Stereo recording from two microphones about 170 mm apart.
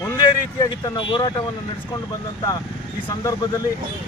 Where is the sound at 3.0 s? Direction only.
20° left (ahead or behind).